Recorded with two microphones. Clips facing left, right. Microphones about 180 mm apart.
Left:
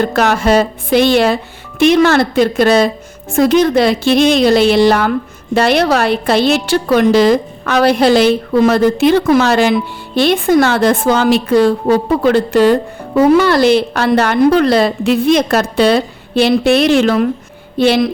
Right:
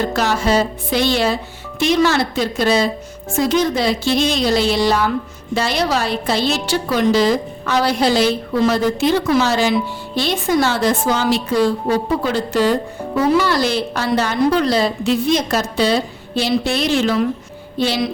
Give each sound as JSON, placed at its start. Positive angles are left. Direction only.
{"t": 0.0, "sound": "a woman's voice", "side_deg": 60}